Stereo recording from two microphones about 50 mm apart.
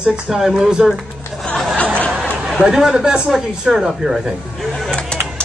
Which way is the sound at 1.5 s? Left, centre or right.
Centre.